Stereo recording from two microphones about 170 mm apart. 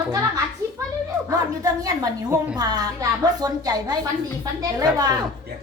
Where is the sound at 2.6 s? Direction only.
20° right (ahead or behind).